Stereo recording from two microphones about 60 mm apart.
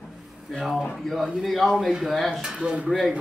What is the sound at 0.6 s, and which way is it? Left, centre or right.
A man's voice, centre.